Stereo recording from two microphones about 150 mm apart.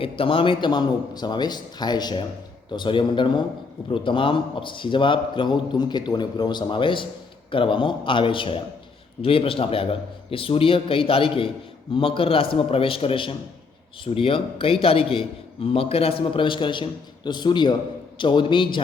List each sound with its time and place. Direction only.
0.0 s a man's voice: 35° left (ahead or behind)